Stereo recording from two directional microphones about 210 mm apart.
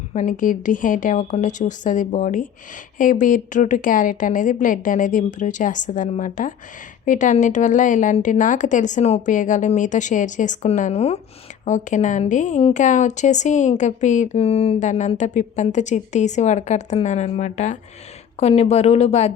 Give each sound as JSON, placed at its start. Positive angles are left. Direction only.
{"t": 0.1, "sound": "a woman's voice", "side_deg": 40}